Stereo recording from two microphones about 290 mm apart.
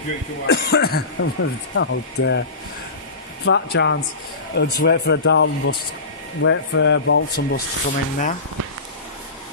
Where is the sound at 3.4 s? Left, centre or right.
Left.